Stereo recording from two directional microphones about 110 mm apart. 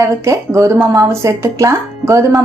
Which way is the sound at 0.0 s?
30° right (ahead or behind).